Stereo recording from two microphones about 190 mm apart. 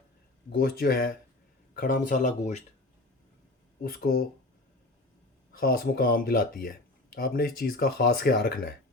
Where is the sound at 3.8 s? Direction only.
55° left (ahead or behind).